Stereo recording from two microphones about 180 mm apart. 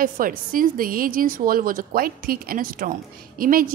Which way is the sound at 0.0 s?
50° right (ahead or behind).